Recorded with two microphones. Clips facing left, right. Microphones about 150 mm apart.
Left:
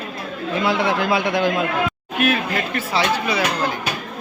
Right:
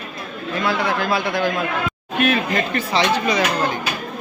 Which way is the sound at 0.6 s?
25° left (ahead or behind).